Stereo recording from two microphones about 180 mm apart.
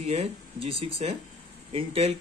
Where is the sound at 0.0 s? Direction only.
35° right (ahead or behind).